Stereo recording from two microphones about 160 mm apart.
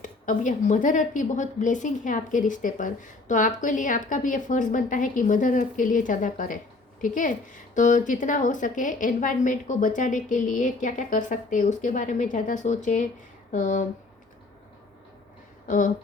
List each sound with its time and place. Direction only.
0.0 s a woman's voice: 55° left (ahead or behind)
15.6 s speech: 55° left (ahead or behind)